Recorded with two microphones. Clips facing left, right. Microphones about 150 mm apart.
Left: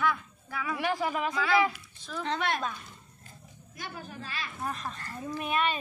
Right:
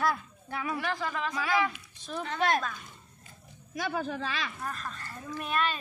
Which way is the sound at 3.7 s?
90° right.